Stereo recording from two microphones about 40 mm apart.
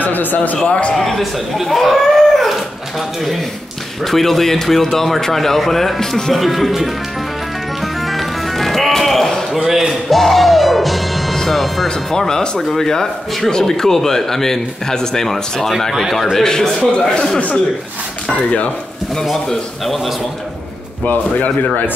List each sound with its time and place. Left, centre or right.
0.0 s a man's voice: left
0.7 s a man's voice: left
0.9 s speech: centre
4.0 s speech: centre
6.4 s speech: centre
7.8 s music: centre
9.7 s music: centre
12.1 s speech: centre
15.9 s speech: centre
16.3 s speech: centre
18.3 s a man's voice: left
21.0 s a man's voice: left